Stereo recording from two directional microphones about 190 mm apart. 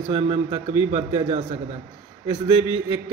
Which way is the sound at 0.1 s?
25° right (ahead or behind).